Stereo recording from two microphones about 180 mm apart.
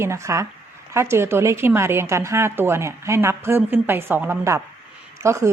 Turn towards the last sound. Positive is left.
turn(degrees=-15)  # may be behind; listen again after turning